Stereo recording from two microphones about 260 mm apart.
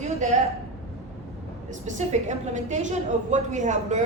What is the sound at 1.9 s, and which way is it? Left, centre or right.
A woman's voice, right.